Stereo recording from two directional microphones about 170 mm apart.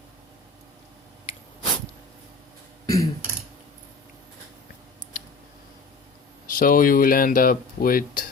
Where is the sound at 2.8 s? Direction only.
20° left (ahead or behind).